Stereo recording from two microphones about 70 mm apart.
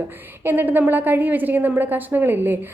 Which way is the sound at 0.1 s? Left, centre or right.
Right.